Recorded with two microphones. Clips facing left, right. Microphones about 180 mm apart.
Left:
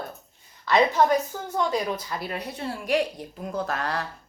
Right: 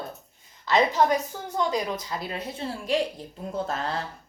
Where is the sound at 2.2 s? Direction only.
25° right (ahead or behind).